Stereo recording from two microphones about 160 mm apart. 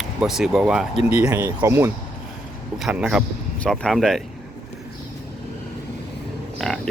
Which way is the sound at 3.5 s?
5° left (ahead or behind).